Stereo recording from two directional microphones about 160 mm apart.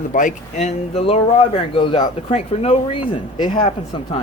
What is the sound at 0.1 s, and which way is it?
Speech, 55° left (ahead or behind).